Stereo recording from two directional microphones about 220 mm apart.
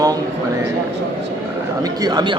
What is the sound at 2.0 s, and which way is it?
Speech, 20° right (ahead or behind).